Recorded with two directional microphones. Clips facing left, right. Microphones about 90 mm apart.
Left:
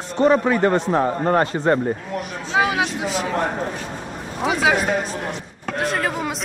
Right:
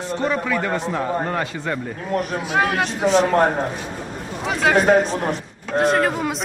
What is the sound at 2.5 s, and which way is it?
Speech, centre (ahead or behind).